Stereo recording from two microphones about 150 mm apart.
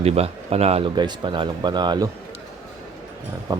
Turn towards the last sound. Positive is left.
turn(degrees=-30)  # may be behind; listen again after turning